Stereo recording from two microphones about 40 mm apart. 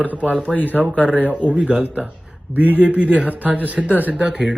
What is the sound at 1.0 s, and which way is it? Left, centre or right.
A man's voice, right.